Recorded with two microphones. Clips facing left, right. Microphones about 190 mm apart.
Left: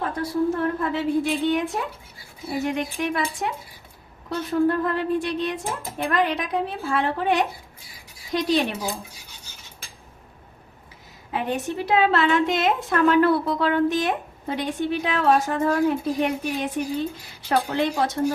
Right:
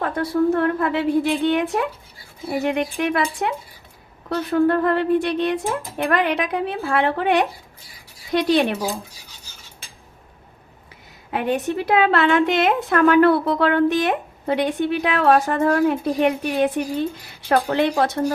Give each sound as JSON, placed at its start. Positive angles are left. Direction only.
{"t": 0.0, "sound": "a woman's voice", "side_deg": -65}
{"t": 11.3, "sound": "a woman's voice", "side_deg": -65}